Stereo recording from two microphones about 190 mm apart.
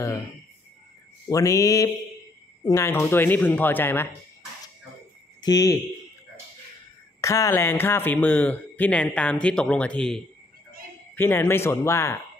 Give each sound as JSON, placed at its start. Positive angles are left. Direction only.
{"t": 1.3, "sound": "speech", "side_deg": 15}
{"t": 5.4, "sound": "speech", "side_deg": 20}
{"t": 7.2, "sound": "speech", "side_deg": 15}